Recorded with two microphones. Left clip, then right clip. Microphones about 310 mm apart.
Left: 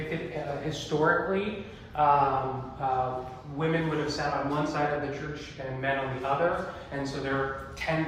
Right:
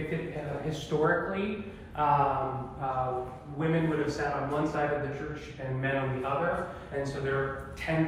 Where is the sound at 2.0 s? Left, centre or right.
Left.